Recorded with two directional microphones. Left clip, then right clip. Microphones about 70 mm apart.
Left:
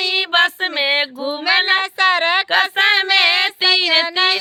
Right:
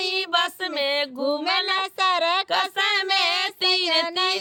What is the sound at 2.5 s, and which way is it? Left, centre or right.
Female singing, left.